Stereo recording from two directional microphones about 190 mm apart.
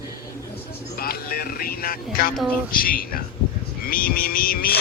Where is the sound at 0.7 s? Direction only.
55° left (ahead or behind).